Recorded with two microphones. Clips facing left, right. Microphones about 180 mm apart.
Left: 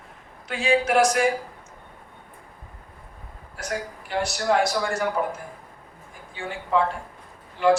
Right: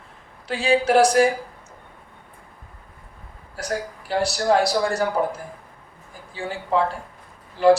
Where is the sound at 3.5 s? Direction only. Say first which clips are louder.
Right 3 dB; 35° right (ahead or behind).